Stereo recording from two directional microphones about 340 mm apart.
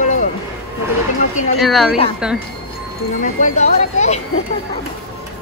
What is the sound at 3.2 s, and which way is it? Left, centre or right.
Speech, left.